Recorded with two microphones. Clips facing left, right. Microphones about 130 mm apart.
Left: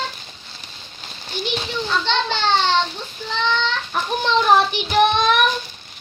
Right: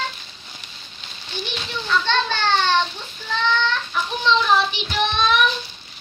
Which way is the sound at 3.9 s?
50° left (ahead or behind).